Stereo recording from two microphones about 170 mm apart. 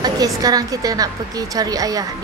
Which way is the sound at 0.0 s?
20° right (ahead or behind).